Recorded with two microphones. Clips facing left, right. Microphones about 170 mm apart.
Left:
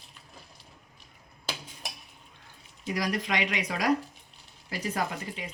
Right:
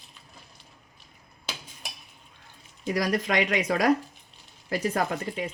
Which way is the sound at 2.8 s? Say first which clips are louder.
Right 4 dB; 45° right (ahead or behind).